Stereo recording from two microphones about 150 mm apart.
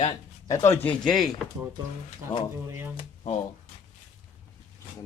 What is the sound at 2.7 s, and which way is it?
Speech, 15° right (ahead or behind).